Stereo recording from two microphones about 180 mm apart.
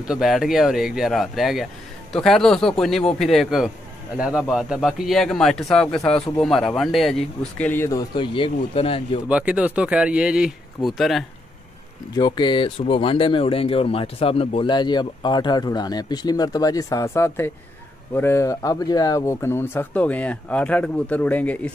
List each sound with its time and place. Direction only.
0.1 s speech: centre (ahead or behind)
8.1 s speech: 30° left (ahead or behind)
9.3 s speech: 5° right (ahead or behind)
12.2 s speech: 25° left (ahead or behind); by 21.7 s 10° left (ahead or behind)